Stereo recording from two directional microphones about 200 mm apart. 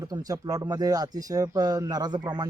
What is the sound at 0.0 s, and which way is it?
Speech, 20° right (ahead or behind).